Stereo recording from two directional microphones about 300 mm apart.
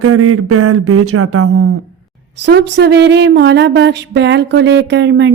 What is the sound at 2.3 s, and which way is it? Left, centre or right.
Speech, right.